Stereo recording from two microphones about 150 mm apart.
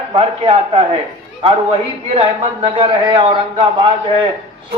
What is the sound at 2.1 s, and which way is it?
A man's voice, 40° right (ahead or behind).